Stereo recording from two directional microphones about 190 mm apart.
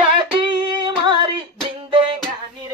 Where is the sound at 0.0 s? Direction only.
25° right (ahead or behind).